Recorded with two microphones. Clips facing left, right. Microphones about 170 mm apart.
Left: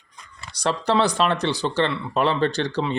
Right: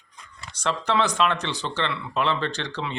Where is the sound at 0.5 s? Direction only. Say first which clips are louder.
Left 3 dB; 35° left (ahead or behind).